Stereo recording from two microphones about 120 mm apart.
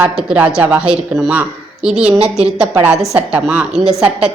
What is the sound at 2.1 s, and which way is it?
Speech, 55° right (ahead or behind).